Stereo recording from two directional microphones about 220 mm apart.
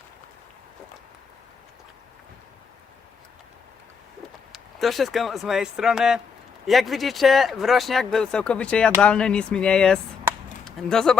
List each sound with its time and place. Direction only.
4.5 s speech: centre (ahead or behind)